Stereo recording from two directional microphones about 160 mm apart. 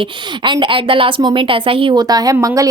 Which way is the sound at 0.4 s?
30° right (ahead or behind).